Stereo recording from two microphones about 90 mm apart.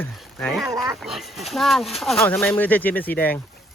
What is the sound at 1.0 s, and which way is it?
Speech, centre (ahead or behind).